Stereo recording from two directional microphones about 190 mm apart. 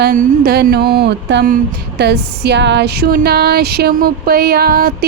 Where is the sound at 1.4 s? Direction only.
55° right (ahead or behind).